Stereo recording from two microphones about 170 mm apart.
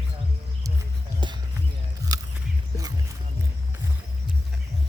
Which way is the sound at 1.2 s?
25° right (ahead or behind).